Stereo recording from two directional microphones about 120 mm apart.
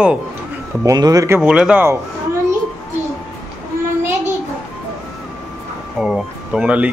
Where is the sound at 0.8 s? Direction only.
30° right (ahead or behind).